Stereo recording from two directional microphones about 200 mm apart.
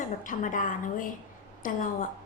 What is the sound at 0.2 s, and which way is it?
A woman's voice, 40° left (ahead or behind).